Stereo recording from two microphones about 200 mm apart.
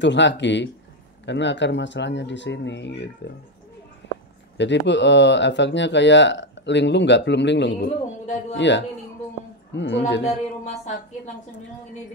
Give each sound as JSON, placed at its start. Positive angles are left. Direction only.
{"t": 0.0, "sound": "speech", "side_deg": 65}
{"t": 4.0, "sound": "a sound", "side_deg": 65}
{"t": 4.6, "sound": "speech", "side_deg": 60}
{"t": 10.2, "sound": "speech", "side_deg": 35}